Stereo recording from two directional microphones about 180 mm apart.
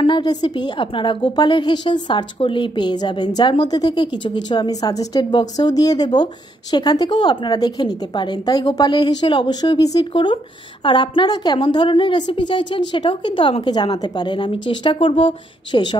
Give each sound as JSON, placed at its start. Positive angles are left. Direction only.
{"t": 0.0, "sound": "a woman's voice", "side_deg": 25}